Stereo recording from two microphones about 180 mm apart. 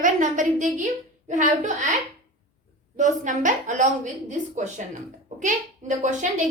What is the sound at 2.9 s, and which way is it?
A woman's voice, 45° right (ahead or behind).